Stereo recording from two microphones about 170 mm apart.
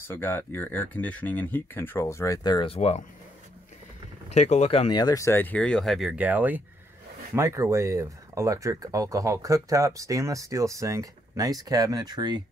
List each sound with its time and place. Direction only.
0.1 s speech: 15° left (ahead or behind); by 3.1 s 40° left (ahead or behind)
4.3 s speech: 40° left (ahead or behind); by 12.4 s 25° right (ahead or behind)